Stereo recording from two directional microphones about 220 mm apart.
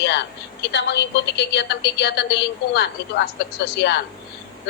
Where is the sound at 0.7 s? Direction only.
50° left (ahead or behind).